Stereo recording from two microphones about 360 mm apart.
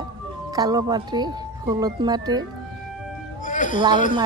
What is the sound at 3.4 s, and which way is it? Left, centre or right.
Cat, left.